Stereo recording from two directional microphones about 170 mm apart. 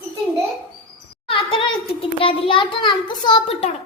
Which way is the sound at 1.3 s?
30° left (ahead or behind).